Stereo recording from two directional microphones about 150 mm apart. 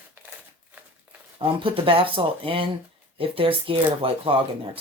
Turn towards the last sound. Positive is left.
turn(degrees=-35)  # may be behind; listen again after turning